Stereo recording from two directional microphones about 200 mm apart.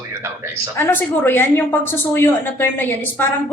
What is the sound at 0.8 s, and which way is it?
A woman's voice, 10° left (ahead or behind).